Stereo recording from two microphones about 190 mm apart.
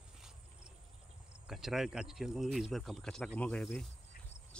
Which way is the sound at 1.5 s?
Centre (ahead or behind).